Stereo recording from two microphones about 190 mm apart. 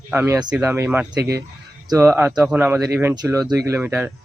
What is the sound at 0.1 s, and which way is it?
Speech, 10° right (ahead or behind).